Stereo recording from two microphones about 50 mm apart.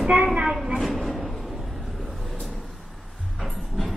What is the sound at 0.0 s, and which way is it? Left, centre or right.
Speech, right.